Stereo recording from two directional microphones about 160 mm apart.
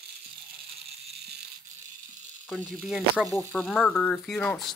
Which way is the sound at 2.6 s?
5° right (ahead or behind).